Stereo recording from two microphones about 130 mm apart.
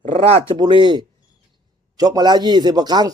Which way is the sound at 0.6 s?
35° right (ahead or behind).